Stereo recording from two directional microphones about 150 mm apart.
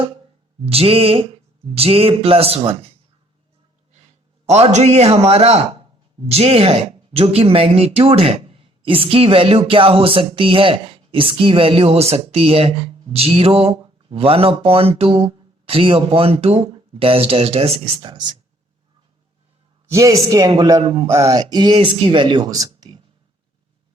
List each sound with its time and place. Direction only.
0.6 s speech: 40° right (ahead or behind)
4.4 s a man's voice: 45° right (ahead or behind)
19.9 s speech: 20° right (ahead or behind)
21.1 s speech: 20° right (ahead or behind)